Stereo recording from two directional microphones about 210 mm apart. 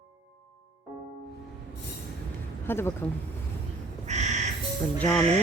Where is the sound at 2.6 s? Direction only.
10° left (ahead or behind).